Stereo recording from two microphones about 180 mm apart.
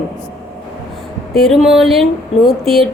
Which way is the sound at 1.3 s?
Centre (ahead or behind).